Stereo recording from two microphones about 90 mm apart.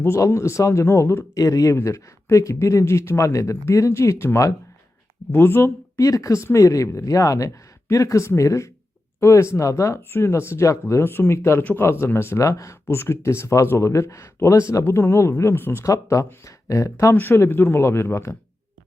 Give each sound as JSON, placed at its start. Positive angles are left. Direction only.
{"t": 0.0, "sound": "speech", "side_deg": 30}
{"t": 6.0, "sound": "speech", "side_deg": 40}
{"t": 17.2, "sound": "speech", "side_deg": 25}